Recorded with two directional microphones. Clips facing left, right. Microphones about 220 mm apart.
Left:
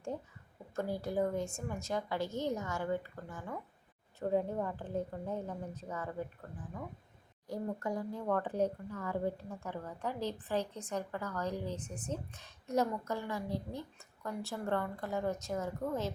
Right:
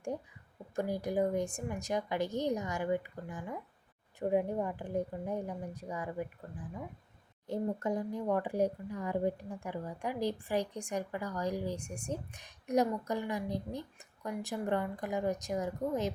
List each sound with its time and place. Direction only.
0.8 s speech: 15° right (ahead or behind)
7.4 s speech: 25° right (ahead or behind)